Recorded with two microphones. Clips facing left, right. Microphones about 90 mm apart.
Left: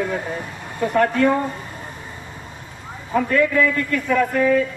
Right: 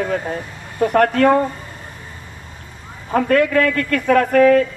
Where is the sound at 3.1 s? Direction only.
65° right (ahead or behind).